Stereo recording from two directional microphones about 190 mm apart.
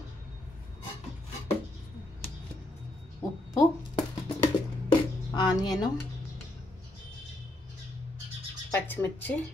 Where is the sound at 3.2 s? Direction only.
20° left (ahead or behind).